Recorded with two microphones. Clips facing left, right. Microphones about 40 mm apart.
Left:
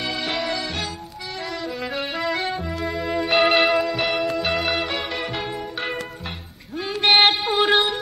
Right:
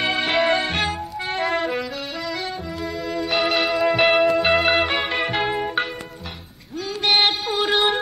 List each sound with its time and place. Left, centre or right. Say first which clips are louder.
0.0 s music: right 6 dB; right
2.3 s music: left 3 dB; centre
3.8 s music: right 6 dB; right
4.5 s music: right 5 dB; centre
4.8 s music: right 4 dB; right
7.0 s mantra: left 3 dB; centre
7.4 s music: left 3 dB; centre